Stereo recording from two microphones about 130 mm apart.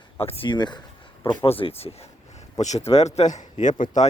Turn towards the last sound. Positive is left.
turn(degrees=75)  # may be behind; listen again after turning